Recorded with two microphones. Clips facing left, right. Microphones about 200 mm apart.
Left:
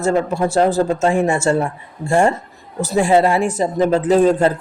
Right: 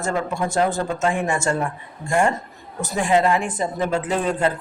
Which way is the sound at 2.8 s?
35° left (ahead or behind).